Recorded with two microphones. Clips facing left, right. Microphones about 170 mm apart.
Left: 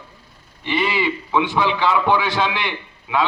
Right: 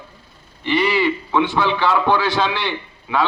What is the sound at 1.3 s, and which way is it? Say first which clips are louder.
A man's voice: right 1 dB; 10° left (ahead or behind).